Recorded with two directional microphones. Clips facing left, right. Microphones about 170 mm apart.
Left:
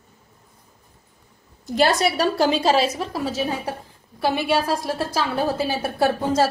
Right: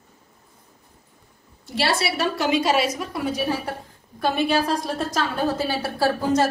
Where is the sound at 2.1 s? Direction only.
30° left (ahead or behind).